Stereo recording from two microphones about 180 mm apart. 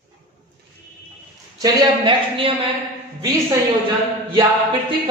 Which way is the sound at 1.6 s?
30° right (ahead or behind).